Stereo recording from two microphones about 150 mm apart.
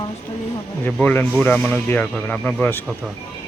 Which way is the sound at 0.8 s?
10° left (ahead or behind).